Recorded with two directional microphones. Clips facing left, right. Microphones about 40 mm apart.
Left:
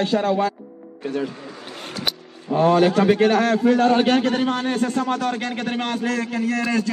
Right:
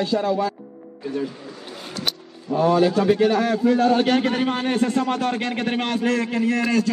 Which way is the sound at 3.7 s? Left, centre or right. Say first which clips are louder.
Left 1 dB; left.